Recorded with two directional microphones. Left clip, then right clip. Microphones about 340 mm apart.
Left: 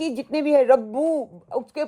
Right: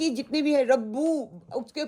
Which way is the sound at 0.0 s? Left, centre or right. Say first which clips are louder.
Left 2 dB; centre.